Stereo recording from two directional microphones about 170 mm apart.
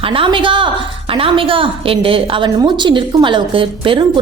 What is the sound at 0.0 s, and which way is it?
A woman's voice, 30° right (ahead or behind).